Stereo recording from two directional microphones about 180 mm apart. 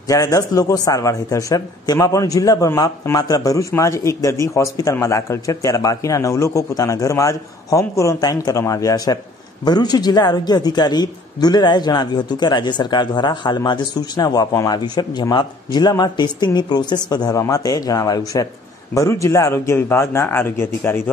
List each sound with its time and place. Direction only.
0.1 s a man's voice: 20° left (ahead or behind)